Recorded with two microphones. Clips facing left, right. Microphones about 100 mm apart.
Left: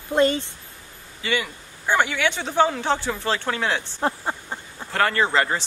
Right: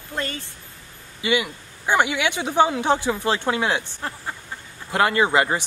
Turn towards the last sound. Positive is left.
turn(degrees=-15)  # may be behind; listen again after turning